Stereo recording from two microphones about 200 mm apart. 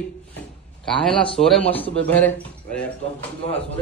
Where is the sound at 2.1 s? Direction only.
10° left (ahead or behind).